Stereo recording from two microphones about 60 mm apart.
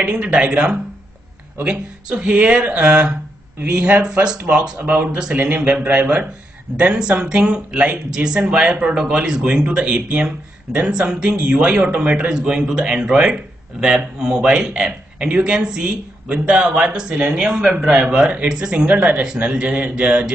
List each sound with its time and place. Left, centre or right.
0.0 s speech: centre
6.9 s speech: centre